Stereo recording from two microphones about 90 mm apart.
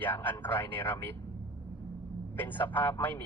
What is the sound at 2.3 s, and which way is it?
Speech, 20° left (ahead or behind).